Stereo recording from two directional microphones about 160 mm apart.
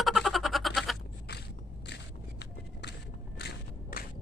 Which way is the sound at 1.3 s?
90° left.